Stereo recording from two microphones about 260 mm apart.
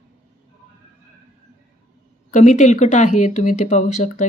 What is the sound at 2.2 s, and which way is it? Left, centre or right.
Speech, left.